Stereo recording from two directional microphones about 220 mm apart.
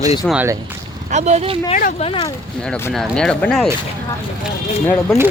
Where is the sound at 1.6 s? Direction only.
30° left (ahead or behind).